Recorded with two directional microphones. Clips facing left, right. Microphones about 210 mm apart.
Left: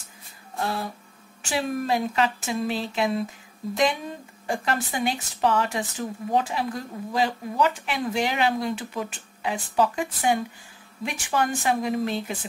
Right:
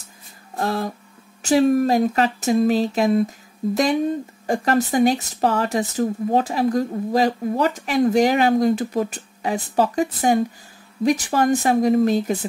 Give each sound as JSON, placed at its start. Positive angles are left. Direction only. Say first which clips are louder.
{"t": 0.6, "sound": "speech", "louder": "right 5 dB", "side_deg": -45}
{"t": 4.5, "sound": "speech", "louder": "right 8 dB", "side_deg": -40}